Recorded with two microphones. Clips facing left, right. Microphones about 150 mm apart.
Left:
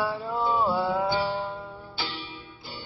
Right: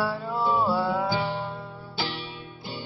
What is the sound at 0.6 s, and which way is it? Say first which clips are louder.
Music: even; 15° left (ahead or behind).